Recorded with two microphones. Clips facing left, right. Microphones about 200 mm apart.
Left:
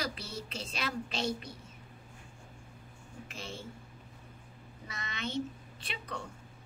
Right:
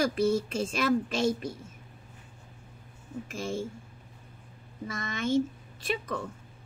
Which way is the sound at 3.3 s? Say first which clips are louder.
Right 11 dB; 45° right (ahead or behind).